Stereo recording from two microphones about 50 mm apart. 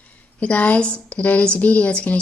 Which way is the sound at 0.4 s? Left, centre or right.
Left.